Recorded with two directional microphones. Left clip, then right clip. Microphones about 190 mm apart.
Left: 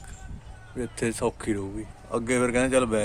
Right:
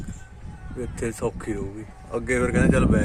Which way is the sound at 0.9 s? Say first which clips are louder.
Left 1 dB; 5° left (ahead or behind).